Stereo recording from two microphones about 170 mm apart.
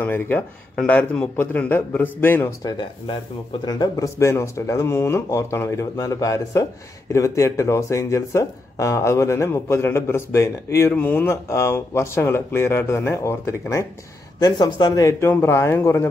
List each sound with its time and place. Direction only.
0.0 s speech: 10° left (ahead or behind)
3.6 s speech: 25° left (ahead or behind)